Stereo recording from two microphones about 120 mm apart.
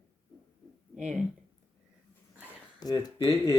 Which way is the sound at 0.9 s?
5° right (ahead or behind).